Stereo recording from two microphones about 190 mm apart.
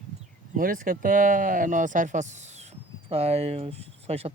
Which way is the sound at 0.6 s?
45° right (ahead or behind).